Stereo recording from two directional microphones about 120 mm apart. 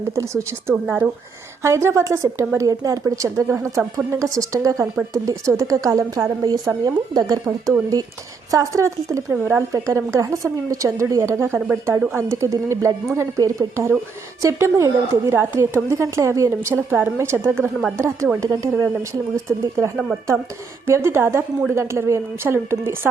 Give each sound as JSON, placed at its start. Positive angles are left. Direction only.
{"t": 0.1, "sound": "a woman's voice", "side_deg": -25}
{"t": 0.7, "sound": "speech", "side_deg": -10}
{"t": 1.6, "sound": "a woman's voice", "side_deg": -25}